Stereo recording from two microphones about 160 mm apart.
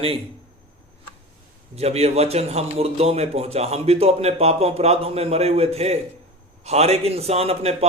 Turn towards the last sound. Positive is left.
turn(degrees=-40)  # may be behind; listen again after turning